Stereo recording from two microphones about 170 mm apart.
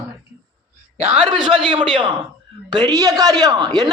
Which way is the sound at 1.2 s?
25° right (ahead or behind).